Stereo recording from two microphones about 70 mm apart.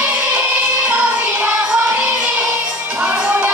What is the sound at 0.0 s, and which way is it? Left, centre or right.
Music, right.